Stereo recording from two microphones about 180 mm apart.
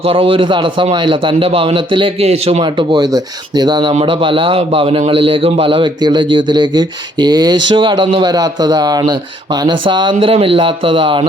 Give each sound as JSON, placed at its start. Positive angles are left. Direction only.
{"t": 0.0, "sound": "a man's voice", "side_deg": -30}